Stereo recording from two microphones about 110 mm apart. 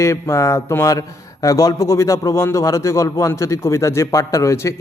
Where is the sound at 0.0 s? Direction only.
25° left (ahead or behind).